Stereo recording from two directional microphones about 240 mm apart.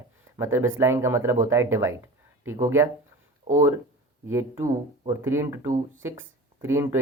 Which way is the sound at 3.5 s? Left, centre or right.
Right.